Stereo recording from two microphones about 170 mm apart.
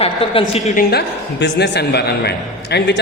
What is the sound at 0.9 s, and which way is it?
A man's voice, 85° left.